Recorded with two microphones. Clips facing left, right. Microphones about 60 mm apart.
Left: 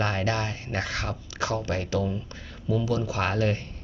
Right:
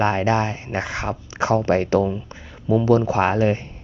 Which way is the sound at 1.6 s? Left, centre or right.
Right.